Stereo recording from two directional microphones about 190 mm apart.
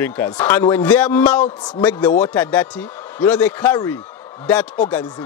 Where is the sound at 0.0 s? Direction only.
10° left (ahead or behind).